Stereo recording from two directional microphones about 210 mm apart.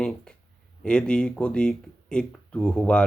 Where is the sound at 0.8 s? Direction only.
5° left (ahead or behind).